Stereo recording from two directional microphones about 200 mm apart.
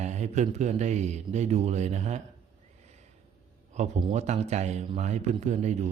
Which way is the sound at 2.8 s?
35° right (ahead or behind).